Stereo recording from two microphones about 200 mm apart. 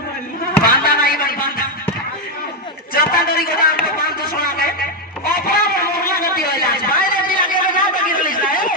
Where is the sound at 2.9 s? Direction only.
45° left (ahead or behind).